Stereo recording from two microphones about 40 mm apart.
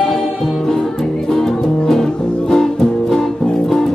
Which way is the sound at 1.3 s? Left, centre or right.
Centre.